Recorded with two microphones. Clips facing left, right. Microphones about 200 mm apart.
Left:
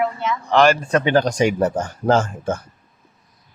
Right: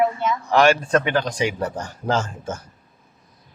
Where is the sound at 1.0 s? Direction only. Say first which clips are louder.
Left 5 dB; 45° left (ahead or behind).